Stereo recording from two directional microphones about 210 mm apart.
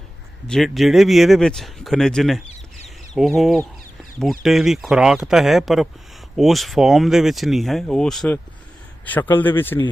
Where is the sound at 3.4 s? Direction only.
Centre (ahead or behind).